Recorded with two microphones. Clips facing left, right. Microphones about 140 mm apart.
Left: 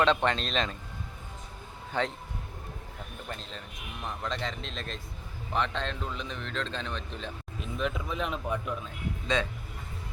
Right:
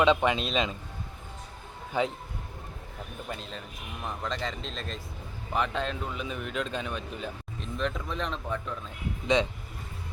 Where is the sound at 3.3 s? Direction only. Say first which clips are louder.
Right 2 dB; 5° right (ahead or behind).